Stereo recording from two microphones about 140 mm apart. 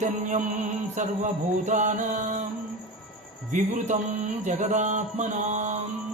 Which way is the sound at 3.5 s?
60° right (ahead or behind).